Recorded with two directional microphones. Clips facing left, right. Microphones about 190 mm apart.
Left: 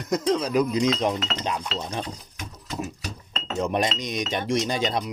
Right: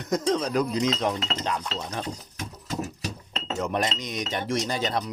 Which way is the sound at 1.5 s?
15° left (ahead or behind).